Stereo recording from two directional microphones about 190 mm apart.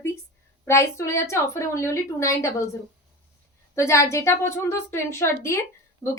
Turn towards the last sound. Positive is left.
turn(degrees=15)  # may be behind; listen again after turning